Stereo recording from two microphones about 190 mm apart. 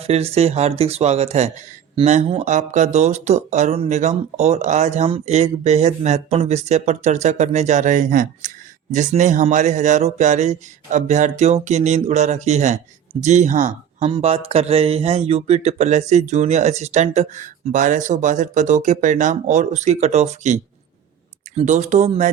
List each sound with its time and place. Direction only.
0.0 s speech: 30° right (ahead or behind)